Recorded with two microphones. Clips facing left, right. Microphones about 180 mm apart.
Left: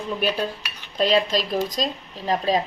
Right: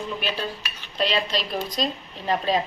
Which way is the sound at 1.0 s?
45° left (ahead or behind).